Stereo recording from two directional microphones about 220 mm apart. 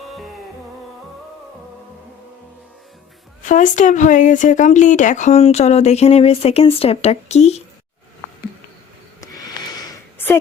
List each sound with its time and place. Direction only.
3.4 s speech: 35° left (ahead or behind)
9.2 s sniff: 15° left (ahead or behind)